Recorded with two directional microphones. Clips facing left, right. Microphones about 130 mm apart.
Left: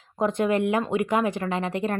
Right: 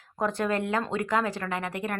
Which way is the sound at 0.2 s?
20° left (ahead or behind).